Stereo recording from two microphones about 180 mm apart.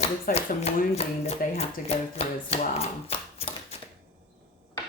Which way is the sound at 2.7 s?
35° left (ahead or behind).